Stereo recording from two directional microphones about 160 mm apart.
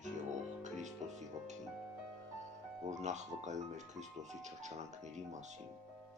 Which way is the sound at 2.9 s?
45° right (ahead or behind).